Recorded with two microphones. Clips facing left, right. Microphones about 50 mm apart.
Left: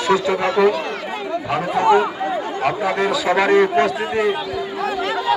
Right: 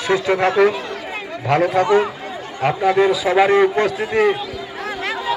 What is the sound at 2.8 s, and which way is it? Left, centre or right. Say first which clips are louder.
Speech: right 6 dB; centre.